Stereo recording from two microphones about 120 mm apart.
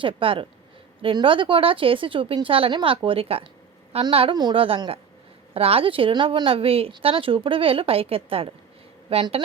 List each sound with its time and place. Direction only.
0.0 s a woman's voice: 45° right (ahead or behind)